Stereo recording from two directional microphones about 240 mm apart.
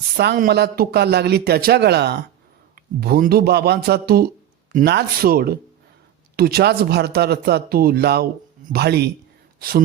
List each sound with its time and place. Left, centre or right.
0.2 s a man's voice: right